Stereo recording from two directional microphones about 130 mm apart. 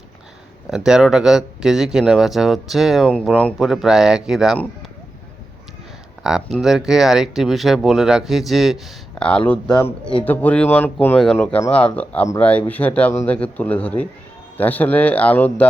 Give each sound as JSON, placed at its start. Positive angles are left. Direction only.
{"t": 0.7, "sound": "speech", "side_deg": -5}
{"t": 6.2, "sound": "speech", "side_deg": -5}
{"t": 9.8, "sound": "a man's voice", "side_deg": 40}
{"t": 10.2, "sound": "speech", "side_deg": 15}